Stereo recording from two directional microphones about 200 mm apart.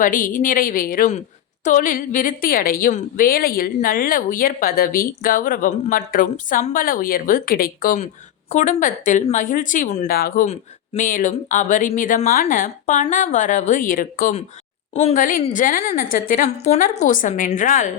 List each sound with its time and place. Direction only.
0.0 s a woman's voice: 40° left (ahead or behind)